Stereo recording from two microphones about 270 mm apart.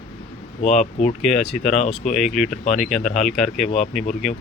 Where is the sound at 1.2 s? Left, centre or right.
Centre.